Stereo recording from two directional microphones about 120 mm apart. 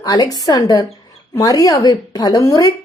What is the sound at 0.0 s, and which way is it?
A woman's voice, 30° left (ahead or behind).